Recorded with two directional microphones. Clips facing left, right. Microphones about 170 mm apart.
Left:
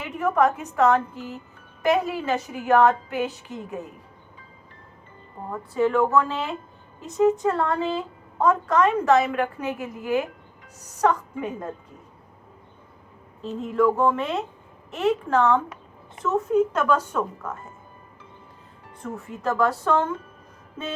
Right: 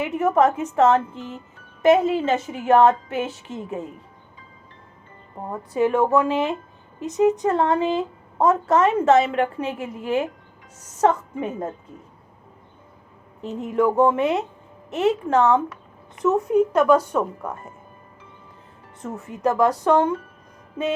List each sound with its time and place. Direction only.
0.0 s a woman's voice: 20° right (ahead or behind)
5.5 s a woman's voice: 20° right (ahead or behind)
13.4 s a woman's voice: 20° right (ahead or behind)
19.0 s a woman's voice: 20° right (ahead or behind)